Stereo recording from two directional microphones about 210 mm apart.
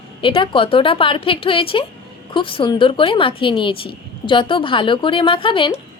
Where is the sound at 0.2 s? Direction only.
25° left (ahead or behind).